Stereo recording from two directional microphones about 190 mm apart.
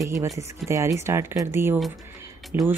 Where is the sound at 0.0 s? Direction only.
15° right (ahead or behind).